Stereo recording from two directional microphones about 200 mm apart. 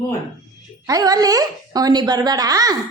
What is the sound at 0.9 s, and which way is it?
A woman's voice, 20° right (ahead or behind).